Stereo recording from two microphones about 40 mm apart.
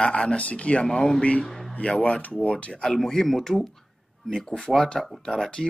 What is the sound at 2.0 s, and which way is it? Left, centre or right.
Speech, left.